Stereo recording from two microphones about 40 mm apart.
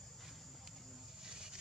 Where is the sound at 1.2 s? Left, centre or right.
Centre.